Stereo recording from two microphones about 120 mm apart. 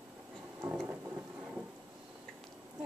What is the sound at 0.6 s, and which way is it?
Thunder, 20° right (ahead or behind).